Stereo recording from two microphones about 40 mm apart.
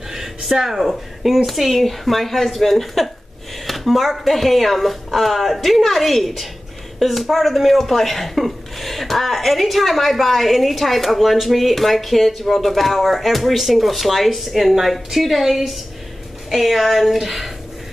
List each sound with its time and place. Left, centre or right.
0.1 s speech: centre
3.6 s a sound: centre
4.1 s speech: centre